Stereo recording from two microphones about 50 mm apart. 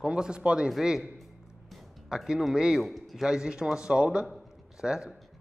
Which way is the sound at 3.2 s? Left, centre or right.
Centre.